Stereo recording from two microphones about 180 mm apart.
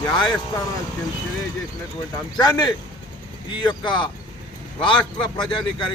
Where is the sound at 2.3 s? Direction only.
20° left (ahead or behind).